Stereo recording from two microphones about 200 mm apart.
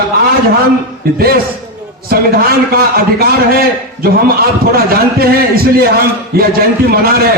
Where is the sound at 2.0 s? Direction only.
50° right (ahead or behind).